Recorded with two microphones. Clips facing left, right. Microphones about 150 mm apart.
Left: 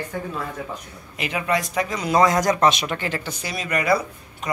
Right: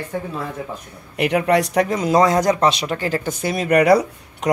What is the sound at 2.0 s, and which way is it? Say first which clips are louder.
Speech: right 1 dB; 35° right (ahead or behind).